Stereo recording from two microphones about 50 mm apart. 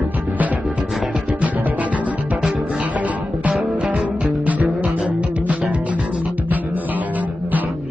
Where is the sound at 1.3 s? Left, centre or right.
Right.